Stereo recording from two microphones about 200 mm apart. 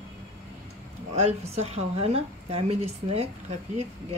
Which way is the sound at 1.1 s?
30° right (ahead or behind).